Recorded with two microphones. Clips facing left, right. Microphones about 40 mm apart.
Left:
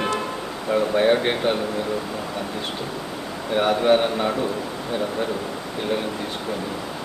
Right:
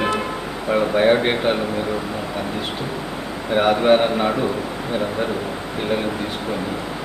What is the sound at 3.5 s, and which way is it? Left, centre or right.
Speech, centre.